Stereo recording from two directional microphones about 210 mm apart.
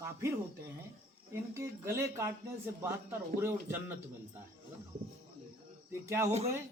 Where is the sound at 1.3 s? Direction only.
15° right (ahead or behind).